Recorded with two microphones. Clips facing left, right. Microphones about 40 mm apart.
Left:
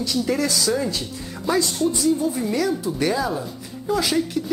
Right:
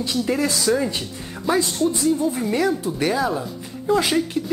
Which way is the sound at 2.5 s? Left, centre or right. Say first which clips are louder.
Right 2 dB; right.